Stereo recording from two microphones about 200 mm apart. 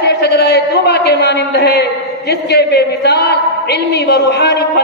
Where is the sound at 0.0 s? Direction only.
55° left (ahead or behind).